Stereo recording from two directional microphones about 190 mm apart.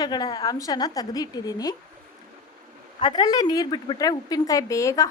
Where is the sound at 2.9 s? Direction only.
20° left (ahead or behind).